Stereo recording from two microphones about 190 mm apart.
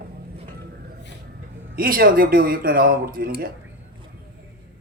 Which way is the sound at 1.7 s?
50° right (ahead or behind).